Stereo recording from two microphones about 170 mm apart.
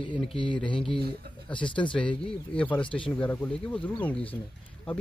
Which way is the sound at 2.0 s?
5° left (ahead or behind).